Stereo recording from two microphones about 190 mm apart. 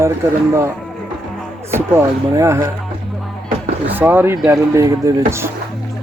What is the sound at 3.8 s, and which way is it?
Speech, 10° right (ahead or behind).